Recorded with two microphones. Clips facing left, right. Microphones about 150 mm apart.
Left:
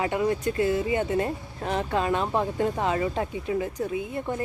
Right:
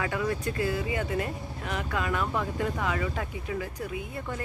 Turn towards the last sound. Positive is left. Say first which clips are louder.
# left 6 dB
turn(degrees=25)  # may be behind; listen again after turning